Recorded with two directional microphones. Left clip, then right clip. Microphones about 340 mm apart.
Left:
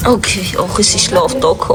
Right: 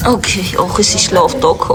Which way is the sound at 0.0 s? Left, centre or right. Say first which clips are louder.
Left 1 dB; centre.